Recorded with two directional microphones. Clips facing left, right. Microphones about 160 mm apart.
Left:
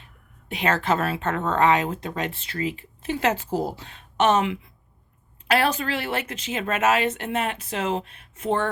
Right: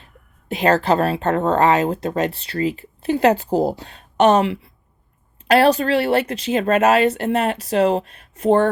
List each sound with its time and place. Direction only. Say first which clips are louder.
0.0 s a woman's voice: right 3 dB; 35° right (ahead or behind)